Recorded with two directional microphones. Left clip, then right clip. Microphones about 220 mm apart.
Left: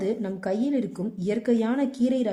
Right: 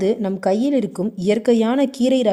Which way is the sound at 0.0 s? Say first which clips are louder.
Right 9 dB; 35° right (ahead or behind).